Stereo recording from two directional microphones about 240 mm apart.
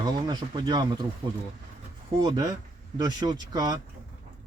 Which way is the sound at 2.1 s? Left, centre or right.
Centre.